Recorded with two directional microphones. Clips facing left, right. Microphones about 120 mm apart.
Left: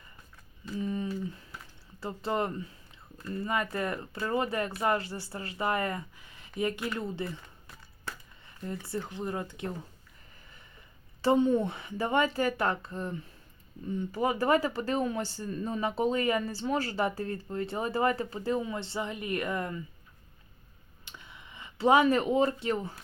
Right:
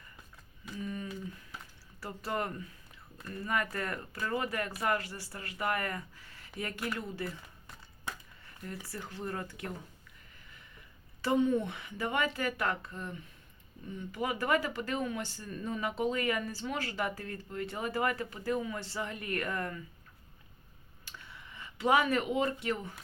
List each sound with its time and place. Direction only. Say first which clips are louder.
0.8 s a sound: left 6 dB; 25° left (ahead or behind)
2.0 s speech: left 5 dB; 25° left (ahead or behind)
8.6 s speech: left 7 dB; 25° left (ahead or behind)
11.2 s speech: left 4 dB; 30° left (ahead or behind)
21.0 s a sound: left 1 dB; 20° left (ahead or behind)
21.8 s speech: left 5 dB; 30° left (ahead or behind)